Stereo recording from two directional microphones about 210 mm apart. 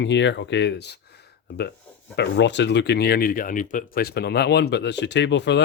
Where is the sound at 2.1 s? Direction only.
55° left (ahead or behind).